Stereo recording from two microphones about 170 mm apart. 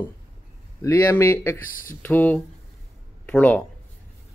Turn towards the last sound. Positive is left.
turn(degrees=10)  # may be behind; listen again after turning